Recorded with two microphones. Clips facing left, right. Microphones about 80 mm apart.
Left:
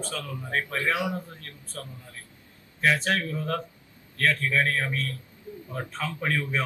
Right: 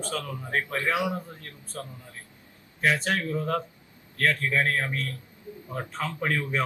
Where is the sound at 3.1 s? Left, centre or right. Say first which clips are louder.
Right 1 dB; centre.